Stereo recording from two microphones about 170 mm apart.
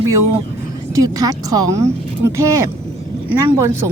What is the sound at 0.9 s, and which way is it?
Speech, 20° right (ahead or behind).